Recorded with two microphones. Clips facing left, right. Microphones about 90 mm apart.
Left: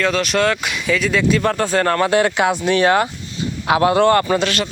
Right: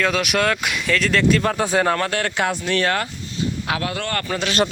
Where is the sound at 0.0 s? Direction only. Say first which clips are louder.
Left 3 dB; 10° right (ahead or behind).